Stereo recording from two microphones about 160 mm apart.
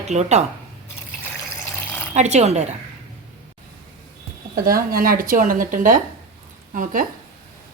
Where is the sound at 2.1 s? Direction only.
45° right (ahead or behind).